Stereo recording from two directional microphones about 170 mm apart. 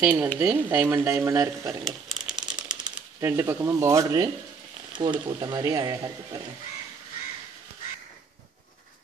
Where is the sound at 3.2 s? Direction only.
15° right (ahead or behind).